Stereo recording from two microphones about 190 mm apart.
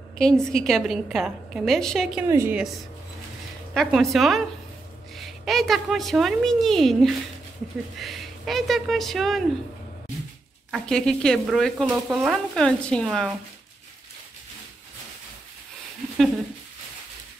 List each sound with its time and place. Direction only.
0.2 s speech: centre (ahead or behind)
2.2 s a woman's voice: 15° right (ahead or behind)
3.7 s speech: centre (ahead or behind)
10.7 s speech: 5° left (ahead or behind)